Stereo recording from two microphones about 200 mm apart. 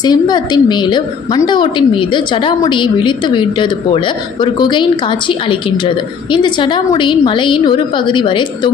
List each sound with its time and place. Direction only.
0.0 s a woman's voice: 20° left (ahead or behind)